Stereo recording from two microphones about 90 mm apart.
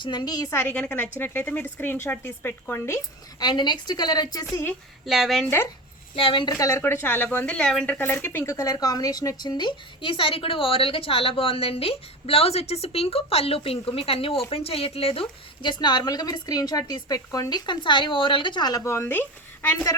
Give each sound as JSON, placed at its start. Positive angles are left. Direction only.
{"t": 0.0, "sound": "speech", "side_deg": 55}
{"t": 0.5, "sound": "a woman's voice", "side_deg": 20}
{"t": 3.3, "sound": "speech", "side_deg": 55}
{"t": 5.0, "sound": "speech", "side_deg": -5}
{"t": 6.1, "sound": "a woman's voice", "side_deg": 70}
{"t": 6.5, "sound": "a woman's voice", "side_deg": 40}
{"t": 6.8, "sound": "speech", "side_deg": 25}
{"t": 7.9, "sound": "a woman's voice", "side_deg": 20}
{"t": 8.5, "sound": "a woman's voice", "side_deg": 40}
{"t": 15.7, "sound": "speech", "side_deg": 50}
{"t": 17.7, "sound": "a woman's voice", "side_deg": 60}
{"t": 18.8, "sound": "speech", "side_deg": 30}